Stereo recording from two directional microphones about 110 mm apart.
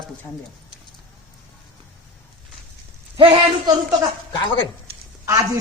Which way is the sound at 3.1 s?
55° right (ahead or behind).